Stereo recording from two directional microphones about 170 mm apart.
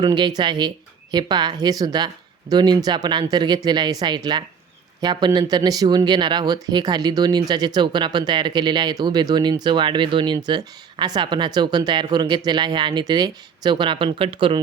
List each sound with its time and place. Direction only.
0.0 s speech: 25° right (ahead or behind)